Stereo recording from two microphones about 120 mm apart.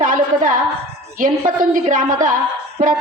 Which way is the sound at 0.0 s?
90° right.